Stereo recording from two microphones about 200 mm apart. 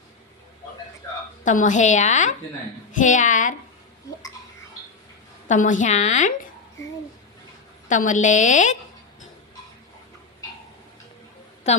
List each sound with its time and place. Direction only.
1.5 s a woman's voice: 40° left (ahead or behind)
5.5 s a woman's voice: 40° left (ahead or behind)
7.9 s a woman's voice: 40° left (ahead or behind)
11.6 s a woman's voice: 35° left (ahead or behind)